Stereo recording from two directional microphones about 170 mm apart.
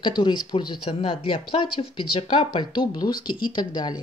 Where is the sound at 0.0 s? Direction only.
30° left (ahead or behind).